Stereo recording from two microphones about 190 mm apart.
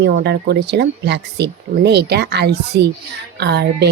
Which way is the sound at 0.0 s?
60° right (ahead or behind).